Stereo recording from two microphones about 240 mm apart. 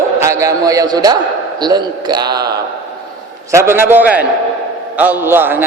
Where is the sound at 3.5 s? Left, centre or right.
Centre.